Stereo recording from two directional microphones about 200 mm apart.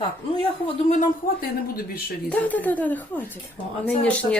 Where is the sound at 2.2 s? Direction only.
10° left (ahead or behind).